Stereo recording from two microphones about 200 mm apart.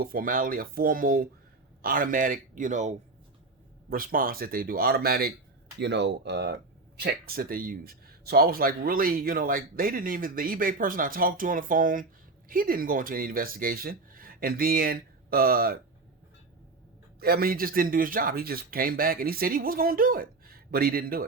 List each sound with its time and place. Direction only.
0.0 s speech: 45° right (ahead or behind)
17.2 s speech: 50° right (ahead or behind)